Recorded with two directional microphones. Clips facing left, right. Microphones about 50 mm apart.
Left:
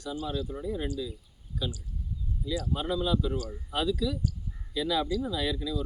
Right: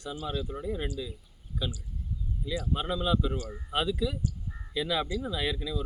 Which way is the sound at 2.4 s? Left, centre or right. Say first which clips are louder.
Left 1 dB; right.